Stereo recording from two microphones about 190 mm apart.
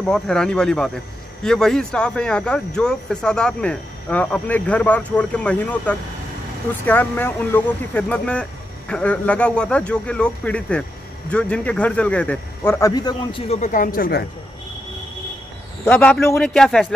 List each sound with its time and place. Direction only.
0.0 s speech: 5° left (ahead or behind); by 13.4 s 20° left (ahead or behind)
13.5 s speech: 40° left (ahead or behind)
15.8 s speech: 5° left (ahead or behind)